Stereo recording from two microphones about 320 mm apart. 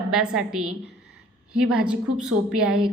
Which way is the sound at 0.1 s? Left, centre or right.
Centre.